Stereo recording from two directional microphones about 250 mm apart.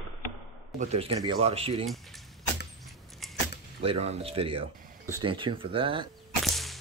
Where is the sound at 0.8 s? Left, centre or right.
Right.